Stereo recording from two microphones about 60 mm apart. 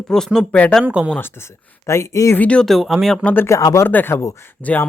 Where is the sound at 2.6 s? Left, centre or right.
Centre.